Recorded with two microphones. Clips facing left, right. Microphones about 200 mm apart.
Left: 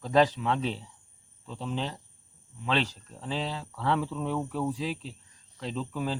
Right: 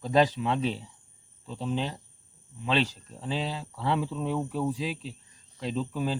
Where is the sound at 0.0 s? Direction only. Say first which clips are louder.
Even; 15° right (ahead or behind).